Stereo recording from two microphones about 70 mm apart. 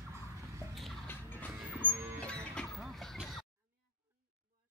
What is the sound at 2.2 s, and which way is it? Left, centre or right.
Music, centre.